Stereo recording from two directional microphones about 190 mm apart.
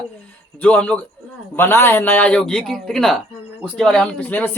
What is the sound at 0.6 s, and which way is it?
A man's voice, 5° left (ahead or behind).